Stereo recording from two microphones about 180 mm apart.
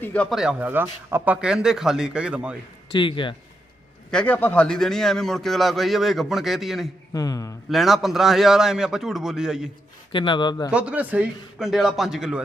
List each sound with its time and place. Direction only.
0.0 s a man's voice: 10° left (ahead or behind)
2.9 s speech: 25° left (ahead or behind)
4.1 s a man's voice: 5° left (ahead or behind)
7.1 s speech: 20° left (ahead or behind)
7.7 s a man's voice: centre (ahead or behind)
10.1 s speech: 25° left (ahead or behind)
10.7 s a man's voice: 5° right (ahead or behind)